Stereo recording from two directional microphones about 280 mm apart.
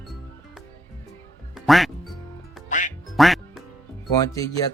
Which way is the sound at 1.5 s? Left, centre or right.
Centre.